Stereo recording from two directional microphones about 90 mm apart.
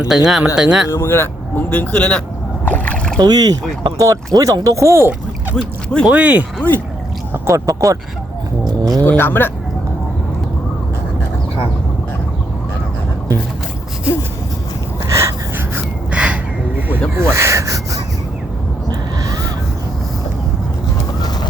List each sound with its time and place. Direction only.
0.0 s speech: 5° right (ahead or behind)
0.9 s speech: 30° left (ahead or behind); by 3.2 s 15° left (ahead or behind)
3.2 s speech: 45° right (ahead or behind); by 5.5 s 25° right (ahead or behind)
6.1 s speech: 15° right (ahead or behind)
7.4 s speech: 35° right (ahead or behind)
8.8 s a sound: 45° right (ahead or behind)
9.0 s speech: 25° left (ahead or behind)
15.1 s wheeze: 30° right (ahead or behind)
16.1 s a sound: 10° right (ahead or behind)
17.2 s wood: 30° right (ahead or behind)